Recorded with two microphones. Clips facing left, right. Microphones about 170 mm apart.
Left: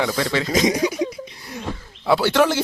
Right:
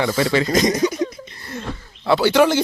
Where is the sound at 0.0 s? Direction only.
Centre (ahead or behind).